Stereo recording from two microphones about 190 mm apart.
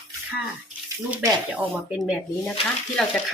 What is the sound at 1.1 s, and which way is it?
Speech, 10° right (ahead or behind).